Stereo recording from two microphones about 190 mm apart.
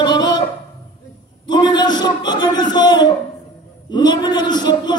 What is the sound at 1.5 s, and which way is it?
A man's voice, 25° left (ahead or behind).